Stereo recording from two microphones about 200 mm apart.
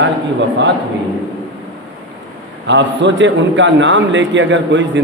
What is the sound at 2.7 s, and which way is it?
A man's voice, 65° right (ahead or behind).